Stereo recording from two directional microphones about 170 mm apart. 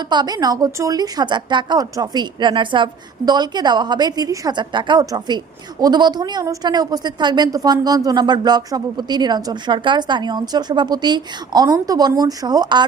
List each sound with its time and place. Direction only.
0.1 s a woman's voice: 25° right (ahead or behind)